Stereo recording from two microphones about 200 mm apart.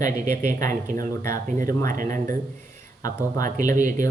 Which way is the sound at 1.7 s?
15° left (ahead or behind).